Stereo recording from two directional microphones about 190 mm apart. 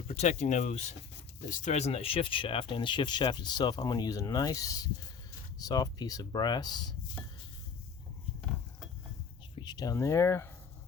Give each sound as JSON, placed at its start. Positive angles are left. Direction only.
{"t": 0.2, "sound": "speech", "side_deg": 40}
{"t": 9.6, "sound": "speech", "side_deg": 20}